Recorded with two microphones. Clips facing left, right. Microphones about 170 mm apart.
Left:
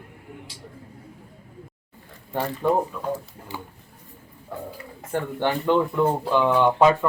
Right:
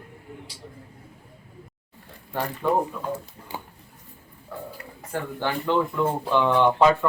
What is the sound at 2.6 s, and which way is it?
Speech, 15° left (ahead or behind).